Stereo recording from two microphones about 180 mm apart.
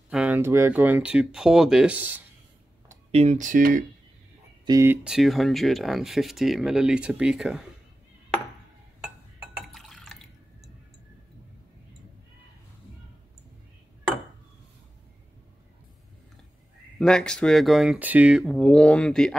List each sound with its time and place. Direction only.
0.1 s speech: 5° right (ahead or behind)
3.1 s speech: 40° right (ahead or behind)
4.6 s speech: 15° right (ahead or behind)
9.6 s drip: centre (ahead or behind)
17.0 s speech: 5° left (ahead or behind)